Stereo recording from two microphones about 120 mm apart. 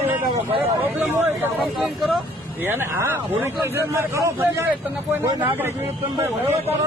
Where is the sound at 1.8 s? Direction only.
Centre (ahead or behind).